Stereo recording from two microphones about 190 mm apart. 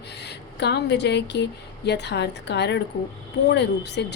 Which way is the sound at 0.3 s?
60° left (ahead or behind).